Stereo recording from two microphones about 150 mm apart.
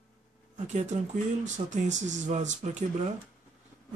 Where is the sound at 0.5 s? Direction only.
50° right (ahead or behind).